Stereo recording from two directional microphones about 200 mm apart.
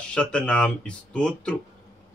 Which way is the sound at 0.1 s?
5° left (ahead or behind).